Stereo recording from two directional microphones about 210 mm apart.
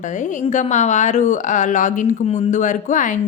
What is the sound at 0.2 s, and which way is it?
A woman's voice, 35° left (ahead or behind).